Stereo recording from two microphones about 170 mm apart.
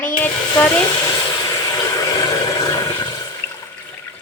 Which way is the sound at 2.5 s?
20° left (ahead or behind).